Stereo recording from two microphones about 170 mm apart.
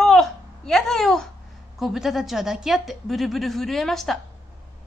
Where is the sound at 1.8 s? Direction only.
Centre (ahead or behind).